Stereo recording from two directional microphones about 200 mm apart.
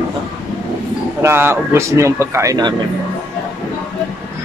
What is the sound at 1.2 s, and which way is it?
Speech, 10° right (ahead or behind).